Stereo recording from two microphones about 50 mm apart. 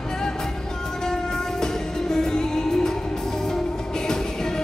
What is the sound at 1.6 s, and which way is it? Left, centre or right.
Music, centre.